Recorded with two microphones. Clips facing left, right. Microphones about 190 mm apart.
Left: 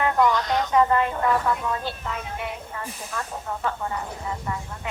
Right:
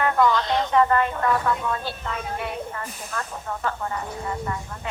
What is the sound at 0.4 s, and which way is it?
Speech, 30° right (ahead or behind).